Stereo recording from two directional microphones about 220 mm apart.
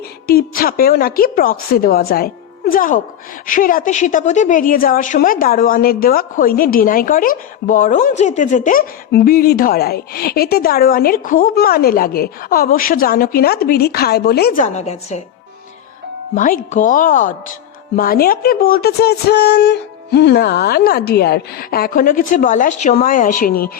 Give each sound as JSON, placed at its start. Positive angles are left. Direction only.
{"t": 0.3, "sound": "a woman's voice", "side_deg": 45}
{"t": 16.3, "sound": "a woman's voice", "side_deg": 35}